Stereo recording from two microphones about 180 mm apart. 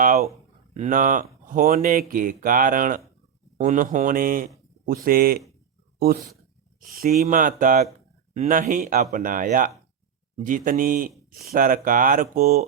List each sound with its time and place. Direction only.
0.0 s a sound: 55° right (ahead or behind)
0.7 s speech: 45° right (ahead or behind)
6.7 s speech: 55° right (ahead or behind)